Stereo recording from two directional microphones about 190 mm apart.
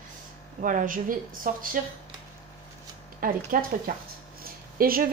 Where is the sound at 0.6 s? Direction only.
45° right (ahead or behind).